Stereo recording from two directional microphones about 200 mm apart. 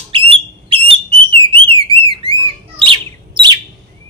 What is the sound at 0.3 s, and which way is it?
Alarm, 25° right (ahead or behind).